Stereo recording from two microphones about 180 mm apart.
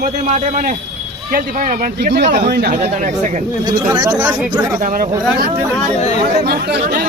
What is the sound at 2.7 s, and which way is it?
Speech, 40° right (ahead or behind).